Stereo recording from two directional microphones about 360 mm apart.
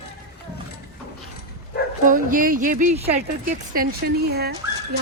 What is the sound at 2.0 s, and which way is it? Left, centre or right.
Speech, right.